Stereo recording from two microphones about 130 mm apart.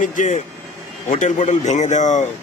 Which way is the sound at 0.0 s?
70° left (ahead or behind).